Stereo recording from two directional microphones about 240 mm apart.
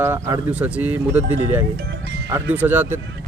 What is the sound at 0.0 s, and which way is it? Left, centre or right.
Speech, centre.